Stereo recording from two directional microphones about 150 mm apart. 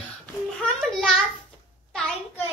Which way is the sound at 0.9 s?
Centre (ahead or behind).